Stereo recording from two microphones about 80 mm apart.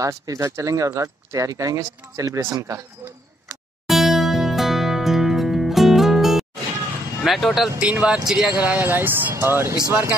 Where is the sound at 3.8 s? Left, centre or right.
Centre.